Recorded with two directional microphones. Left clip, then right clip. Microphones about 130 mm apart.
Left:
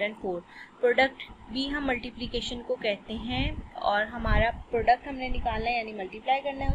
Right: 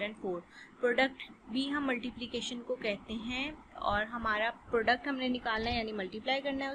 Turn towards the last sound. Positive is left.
turn(degrees=-35)  # may be behind; listen again after turning